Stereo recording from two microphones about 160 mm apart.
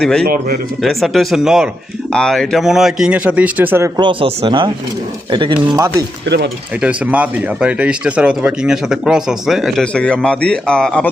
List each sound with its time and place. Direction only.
0.0 s speech: 5° left (ahead or behind)
0.3 s speech: 65° right (ahead or behind)
0.8 s speech: centre (ahead or behind); by 4.0 s 15° right (ahead or behind)
4.0 s speech: 30° right (ahead or behind)
6.2 s mechanisms: 90° right
6.8 s speech: 10° right (ahead or behind)